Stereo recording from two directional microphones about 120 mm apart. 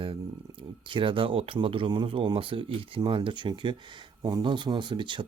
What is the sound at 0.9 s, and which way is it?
Speech, 45° right (ahead or behind).